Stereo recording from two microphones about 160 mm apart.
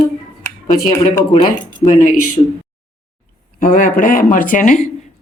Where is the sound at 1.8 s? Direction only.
55° left (ahead or behind).